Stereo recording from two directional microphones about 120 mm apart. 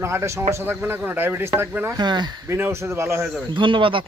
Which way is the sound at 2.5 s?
20° right (ahead or behind).